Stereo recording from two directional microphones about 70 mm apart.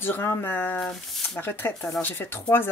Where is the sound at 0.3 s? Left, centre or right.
Left.